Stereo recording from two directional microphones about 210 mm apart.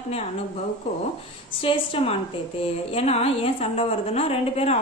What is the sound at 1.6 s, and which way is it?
A woman's voice, 25° left (ahead or behind).